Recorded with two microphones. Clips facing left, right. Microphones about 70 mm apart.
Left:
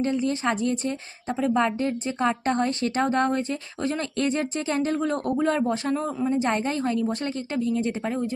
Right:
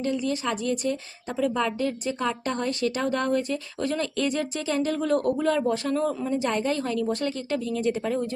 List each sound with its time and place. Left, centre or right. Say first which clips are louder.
0.0 s a woman's voice: left 2 dB; left